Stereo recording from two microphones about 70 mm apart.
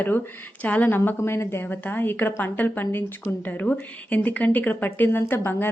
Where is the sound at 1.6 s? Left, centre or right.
Left.